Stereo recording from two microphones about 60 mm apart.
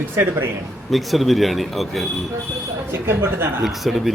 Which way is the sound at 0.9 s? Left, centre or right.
Centre.